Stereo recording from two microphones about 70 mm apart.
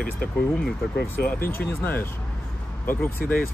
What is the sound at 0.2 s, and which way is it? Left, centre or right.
Speech, centre.